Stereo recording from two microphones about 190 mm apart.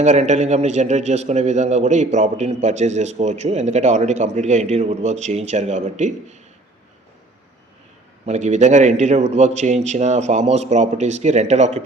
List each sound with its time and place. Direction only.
0.0 s a man's voice: 35° right (ahead or behind)
8.2 s a man's voice: 40° right (ahead or behind)